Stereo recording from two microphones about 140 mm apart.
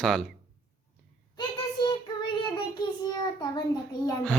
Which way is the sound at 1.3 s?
30° left (ahead or behind).